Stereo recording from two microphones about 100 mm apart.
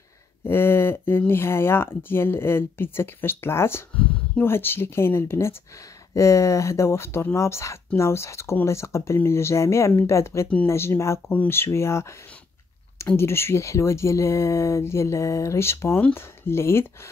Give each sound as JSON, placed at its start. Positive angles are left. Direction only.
{"t": 0.4, "sound": "speech", "side_deg": 25}